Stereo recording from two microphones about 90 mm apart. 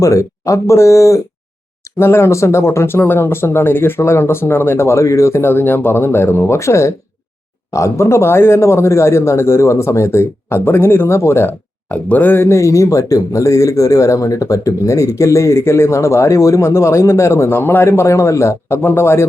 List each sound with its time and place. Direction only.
0.0 s speech: 35° left (ahead or behind)